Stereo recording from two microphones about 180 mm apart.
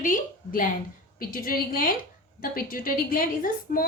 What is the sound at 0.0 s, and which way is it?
A woman's voice, 50° left (ahead or behind).